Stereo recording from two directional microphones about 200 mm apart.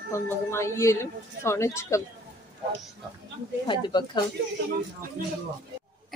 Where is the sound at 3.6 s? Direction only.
25° left (ahead or behind).